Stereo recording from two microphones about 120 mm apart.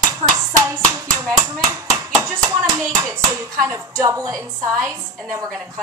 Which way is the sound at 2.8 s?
25° right (ahead or behind).